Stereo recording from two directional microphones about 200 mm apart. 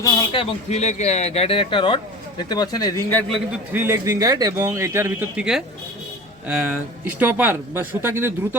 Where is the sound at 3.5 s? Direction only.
10° right (ahead or behind).